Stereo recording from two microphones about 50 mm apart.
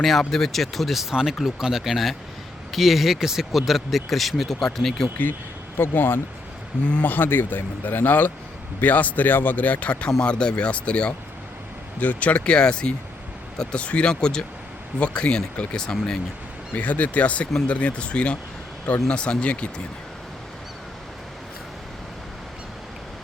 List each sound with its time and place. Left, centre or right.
0.0 s speech: centre
5.7 s speech: left; by 16.2 s centre
16.7 s speech: left